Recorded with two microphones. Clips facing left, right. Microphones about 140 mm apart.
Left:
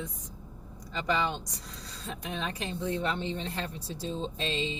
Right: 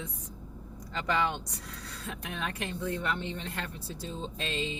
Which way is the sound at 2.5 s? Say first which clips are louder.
Left 2 dB; 25° left (ahead or behind).